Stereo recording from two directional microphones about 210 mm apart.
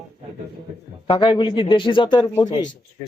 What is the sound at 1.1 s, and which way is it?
A man's voice, 20° left (ahead or behind).